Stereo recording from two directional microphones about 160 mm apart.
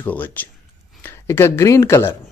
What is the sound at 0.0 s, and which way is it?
A woman's voice, 10° left (ahead or behind).